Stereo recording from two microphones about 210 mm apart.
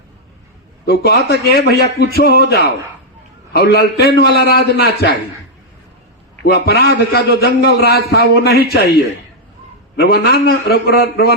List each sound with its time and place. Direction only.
0.9 s a man's voice: 50° left (ahead or behind)
6.4 s a man's voice: 50° left (ahead or behind)
10.0 s a man's voice: 50° left (ahead or behind)